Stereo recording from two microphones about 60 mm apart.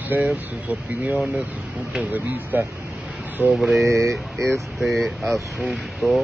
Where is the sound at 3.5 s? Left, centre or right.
Centre.